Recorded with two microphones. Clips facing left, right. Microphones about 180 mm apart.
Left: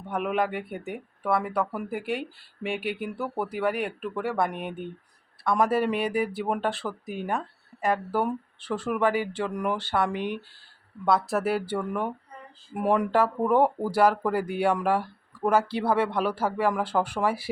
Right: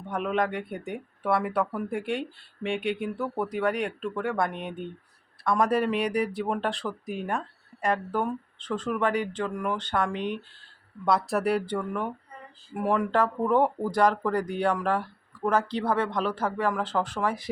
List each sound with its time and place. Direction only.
0.1 s speech: 5° left (ahead or behind)
12.7 s speech: 20° left (ahead or behind)
13.1 s speech: 5° left (ahead or behind)